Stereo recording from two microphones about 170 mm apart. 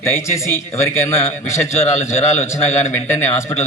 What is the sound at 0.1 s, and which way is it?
A man's voice, 15° left (ahead or behind).